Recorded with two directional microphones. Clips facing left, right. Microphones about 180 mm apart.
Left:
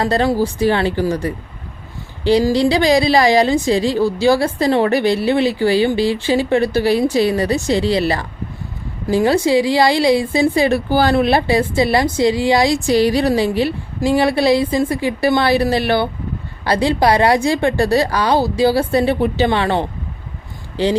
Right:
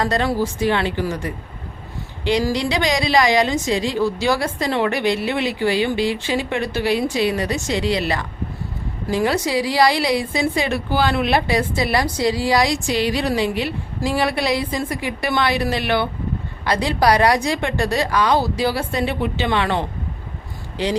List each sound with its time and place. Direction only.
0.0 s a woman's voice: 30° left (ahead or behind)